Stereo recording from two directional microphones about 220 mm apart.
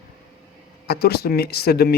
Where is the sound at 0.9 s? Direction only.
45° left (ahead or behind).